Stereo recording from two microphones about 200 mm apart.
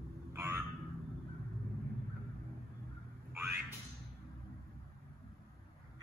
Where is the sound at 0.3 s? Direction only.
15° right (ahead or behind).